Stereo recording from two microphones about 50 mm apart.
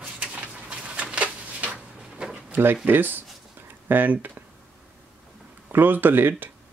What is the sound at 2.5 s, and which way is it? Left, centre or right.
Speech, right.